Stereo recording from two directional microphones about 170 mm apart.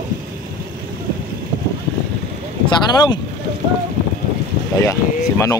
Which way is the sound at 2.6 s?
25° left (ahead or behind).